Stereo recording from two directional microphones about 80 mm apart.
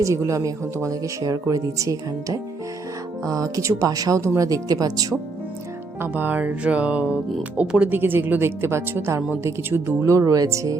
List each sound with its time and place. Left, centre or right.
0.0 s speech: right
3.8 s speech: right
6.0 s speech: right
10.0 s speech: right